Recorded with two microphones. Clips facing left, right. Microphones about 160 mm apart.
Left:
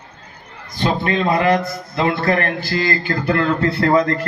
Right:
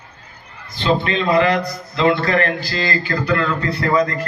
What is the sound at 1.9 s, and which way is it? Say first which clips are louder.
A man's voice: right 2 dB; 50° left (ahead or behind).